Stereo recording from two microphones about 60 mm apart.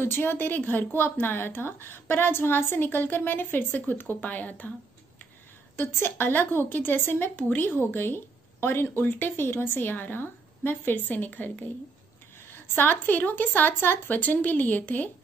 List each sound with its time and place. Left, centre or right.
0.0 s a woman's voice: left
5.8 s a woman's voice: left
12.4 s a woman's voice: left